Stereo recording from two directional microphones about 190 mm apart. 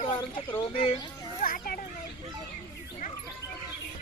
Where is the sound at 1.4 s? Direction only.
50° left (ahead or behind).